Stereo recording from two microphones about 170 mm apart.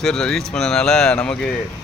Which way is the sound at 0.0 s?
5° left (ahead or behind).